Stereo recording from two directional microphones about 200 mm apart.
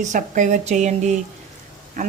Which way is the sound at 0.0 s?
40° right (ahead or behind).